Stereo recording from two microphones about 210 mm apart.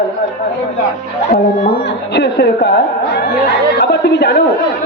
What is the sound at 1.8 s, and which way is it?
Speech, 50° left (ahead or behind).